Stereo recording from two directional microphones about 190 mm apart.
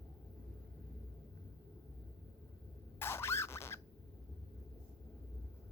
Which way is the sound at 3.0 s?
15° left (ahead or behind).